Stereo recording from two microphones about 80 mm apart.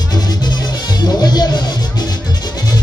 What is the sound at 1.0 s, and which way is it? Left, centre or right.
Music, left.